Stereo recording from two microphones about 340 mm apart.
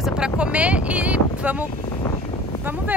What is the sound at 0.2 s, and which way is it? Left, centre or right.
Speech, centre.